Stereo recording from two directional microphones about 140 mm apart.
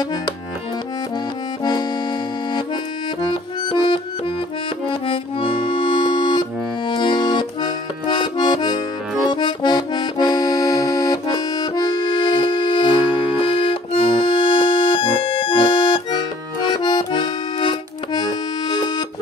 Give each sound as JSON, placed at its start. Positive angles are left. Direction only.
{"t": 0.0, "sound": "music", "side_deg": 25}
{"t": 1.6, "sound": "accordion", "side_deg": 30}
{"t": 3.6, "sound": "music", "side_deg": 35}
{"t": 4.8, "sound": "accordion", "side_deg": 40}